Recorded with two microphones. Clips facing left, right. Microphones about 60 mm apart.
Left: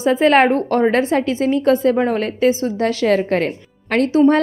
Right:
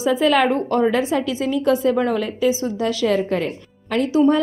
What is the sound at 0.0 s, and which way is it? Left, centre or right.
A woman's voice, left.